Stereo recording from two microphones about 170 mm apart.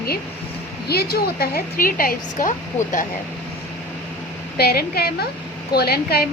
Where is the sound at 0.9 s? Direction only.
65° left (ahead or behind).